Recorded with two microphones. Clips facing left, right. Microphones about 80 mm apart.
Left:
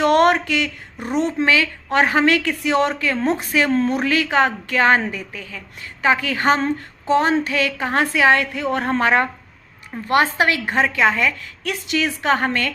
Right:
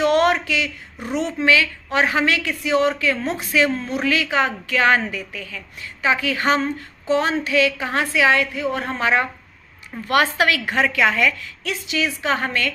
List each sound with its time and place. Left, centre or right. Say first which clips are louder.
0.0 s a sound: left 2 dB; left
1.0 s a woman's voice: left 1 dB; left
9.9 s a woman's voice: left 1 dB; left
11.6 s a woman's voice: left 2 dB; left